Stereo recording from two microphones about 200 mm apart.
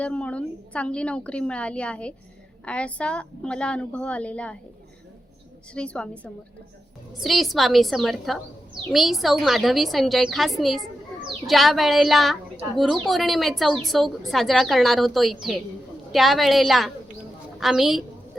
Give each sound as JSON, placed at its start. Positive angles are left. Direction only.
{"t": 0.0, "sound": "a woman's voice", "side_deg": 5}
{"t": 5.7, "sound": "a woman's voice", "side_deg": 5}